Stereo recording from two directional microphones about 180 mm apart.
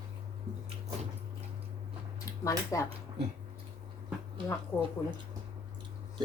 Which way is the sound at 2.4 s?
15° left (ahead or behind).